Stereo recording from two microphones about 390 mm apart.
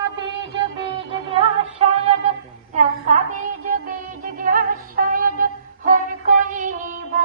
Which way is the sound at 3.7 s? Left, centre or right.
Right.